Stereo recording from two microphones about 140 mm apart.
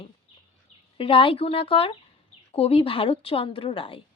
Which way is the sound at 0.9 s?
40° left (ahead or behind).